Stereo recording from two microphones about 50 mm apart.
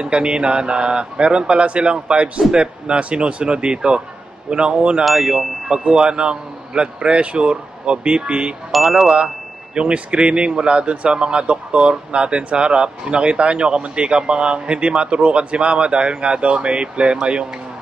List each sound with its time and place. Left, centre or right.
0.0 s speech: centre
5.0 s chime: centre
5.7 s speech: centre
8.7 s chime: centre
9.8 s speech: right